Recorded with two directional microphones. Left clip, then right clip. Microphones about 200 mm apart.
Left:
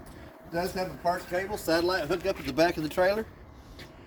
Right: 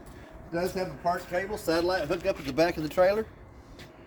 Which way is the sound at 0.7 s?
15° left (ahead or behind).